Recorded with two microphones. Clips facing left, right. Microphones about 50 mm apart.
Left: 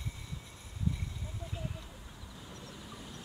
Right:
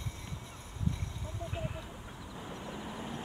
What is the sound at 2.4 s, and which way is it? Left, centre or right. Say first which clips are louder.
Vehicle: right 7 dB; right.